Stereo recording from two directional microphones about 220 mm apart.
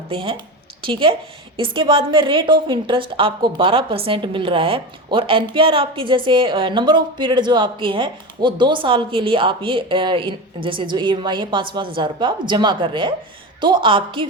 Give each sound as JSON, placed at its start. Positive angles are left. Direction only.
{"t": 0.1, "sound": "a woman's voice", "side_deg": -25}